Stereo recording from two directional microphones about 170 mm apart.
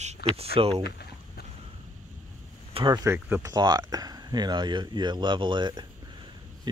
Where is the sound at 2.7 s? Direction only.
25° right (ahead or behind).